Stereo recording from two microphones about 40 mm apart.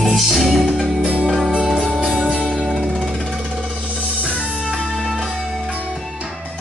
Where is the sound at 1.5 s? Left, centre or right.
Right.